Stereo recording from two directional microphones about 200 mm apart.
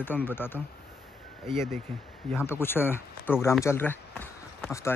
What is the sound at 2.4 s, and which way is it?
Speech, 10° left (ahead or behind).